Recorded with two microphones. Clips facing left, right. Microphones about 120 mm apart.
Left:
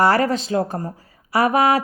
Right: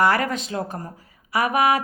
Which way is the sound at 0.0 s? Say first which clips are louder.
Left 3 dB; 35° left (ahead or behind).